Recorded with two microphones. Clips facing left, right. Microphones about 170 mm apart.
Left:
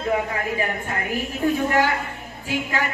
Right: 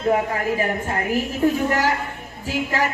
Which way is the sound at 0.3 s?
35° right (ahead or behind).